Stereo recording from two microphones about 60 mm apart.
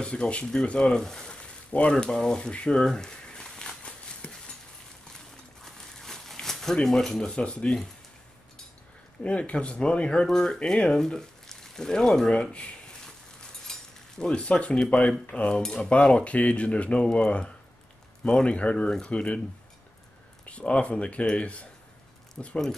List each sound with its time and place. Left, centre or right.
0.0 s a sound: centre
5.8 s crumpling: centre
6.3 s speech: centre
9.2 s speech: centre
13.7 s cutlery: centre
15.3 s speech: left
20.4 s speech: centre